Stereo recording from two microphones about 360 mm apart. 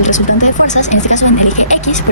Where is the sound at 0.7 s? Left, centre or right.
Centre.